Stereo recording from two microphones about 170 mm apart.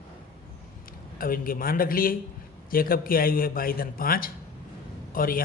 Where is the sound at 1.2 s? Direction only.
55° left (ahead or behind).